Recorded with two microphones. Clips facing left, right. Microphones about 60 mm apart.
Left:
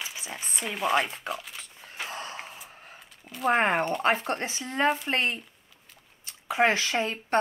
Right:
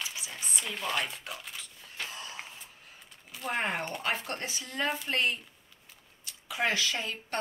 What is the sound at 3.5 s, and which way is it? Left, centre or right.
Speech, left.